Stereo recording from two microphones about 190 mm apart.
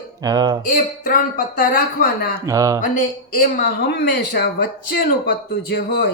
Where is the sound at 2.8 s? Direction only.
45° left (ahead or behind).